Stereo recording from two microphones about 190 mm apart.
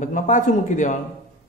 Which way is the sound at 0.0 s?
40° left (ahead or behind).